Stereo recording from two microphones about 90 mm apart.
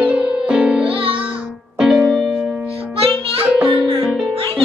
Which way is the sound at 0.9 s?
75° right (ahead or behind).